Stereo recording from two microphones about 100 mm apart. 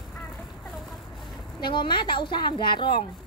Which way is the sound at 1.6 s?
50° left (ahead or behind).